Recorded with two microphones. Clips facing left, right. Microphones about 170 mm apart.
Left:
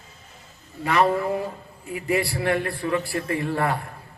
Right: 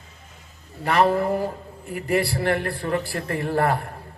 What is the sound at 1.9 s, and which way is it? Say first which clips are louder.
A man's voice: right 1 dB; 55° right (ahead or behind).